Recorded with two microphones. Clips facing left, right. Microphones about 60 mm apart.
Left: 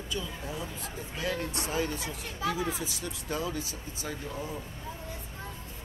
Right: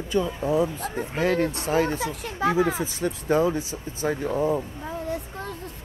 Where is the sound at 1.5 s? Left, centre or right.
Right.